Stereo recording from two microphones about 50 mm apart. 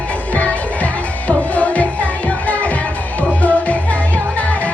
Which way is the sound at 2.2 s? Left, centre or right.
Left.